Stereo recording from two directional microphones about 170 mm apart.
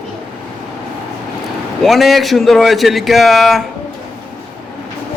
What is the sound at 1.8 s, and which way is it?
A man's voice, centre (ahead or behind).